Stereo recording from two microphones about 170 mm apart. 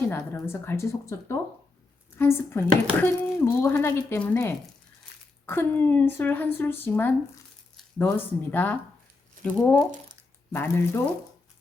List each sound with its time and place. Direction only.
0.1 s speech: 15° left (ahead or behind)